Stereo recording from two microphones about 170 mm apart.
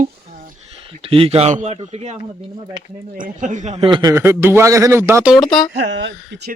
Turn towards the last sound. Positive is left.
turn(degrees=-85)